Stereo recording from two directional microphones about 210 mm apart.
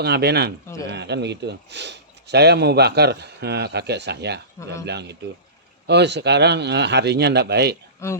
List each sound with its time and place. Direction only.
0.0 s a man's voice: 50° right (ahead or behind)